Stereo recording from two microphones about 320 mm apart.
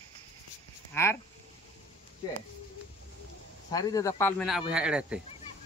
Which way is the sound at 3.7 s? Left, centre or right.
Centre.